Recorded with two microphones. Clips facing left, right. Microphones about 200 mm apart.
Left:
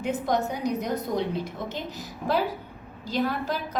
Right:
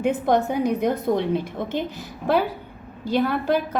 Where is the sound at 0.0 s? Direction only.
60° right (ahead or behind).